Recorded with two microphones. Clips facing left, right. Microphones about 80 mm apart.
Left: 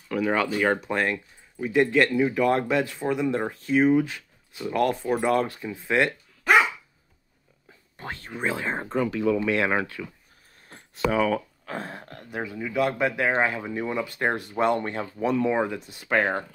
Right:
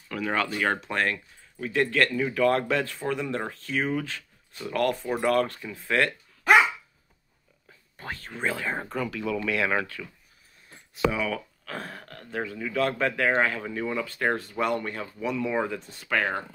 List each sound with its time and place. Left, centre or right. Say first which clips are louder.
0.1 s speech: left 4 dB; centre
8.0 s speech: left 1 dB; left
10.7 s speech: left 1 dB; left
15.5 s speech: left 2 dB; centre